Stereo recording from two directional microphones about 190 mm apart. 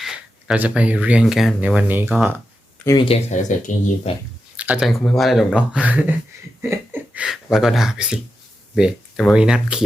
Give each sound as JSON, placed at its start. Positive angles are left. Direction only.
{"t": 0.0, "sound": "speech", "side_deg": -5}
{"t": 2.8, "sound": "speech", "side_deg": 25}
{"t": 4.5, "sound": "speech", "side_deg": -5}